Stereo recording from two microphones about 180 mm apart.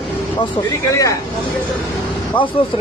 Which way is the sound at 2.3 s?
25° left (ahead or behind).